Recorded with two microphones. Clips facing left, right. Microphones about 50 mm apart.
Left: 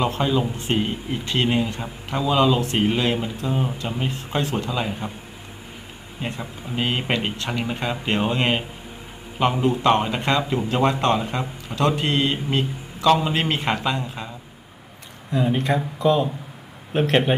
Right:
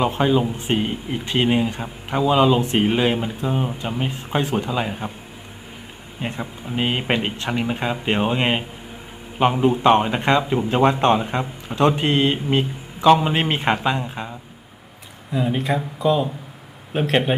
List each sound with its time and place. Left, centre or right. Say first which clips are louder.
0.0 s speech: right 3 dB; centre
6.4 s speech: right 3 dB; centre
15.3 s speech: even; centre